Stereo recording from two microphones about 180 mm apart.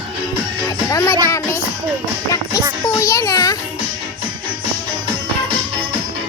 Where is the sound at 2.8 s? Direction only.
15° left (ahead or behind).